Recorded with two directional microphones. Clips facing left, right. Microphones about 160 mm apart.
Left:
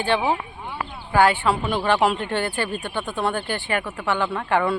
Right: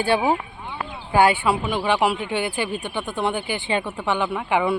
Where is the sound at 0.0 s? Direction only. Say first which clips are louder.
Right 2 dB; 10° right (ahead or behind).